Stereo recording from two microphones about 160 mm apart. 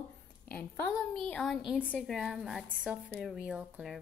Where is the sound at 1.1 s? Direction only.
5° left (ahead or behind).